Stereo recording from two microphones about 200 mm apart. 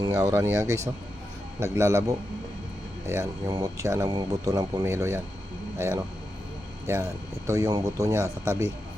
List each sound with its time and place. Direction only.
0.0 s speech: 20° right (ahead or behind)